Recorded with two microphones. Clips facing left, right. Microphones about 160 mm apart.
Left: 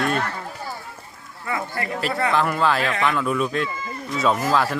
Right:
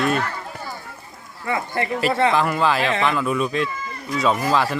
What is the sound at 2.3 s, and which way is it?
Speech, 5° right (ahead or behind).